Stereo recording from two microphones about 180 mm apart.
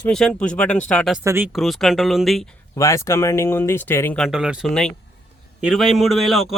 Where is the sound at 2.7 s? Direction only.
15° left (ahead or behind).